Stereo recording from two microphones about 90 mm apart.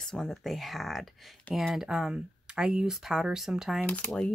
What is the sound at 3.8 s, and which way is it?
Speech, 15° left (ahead or behind).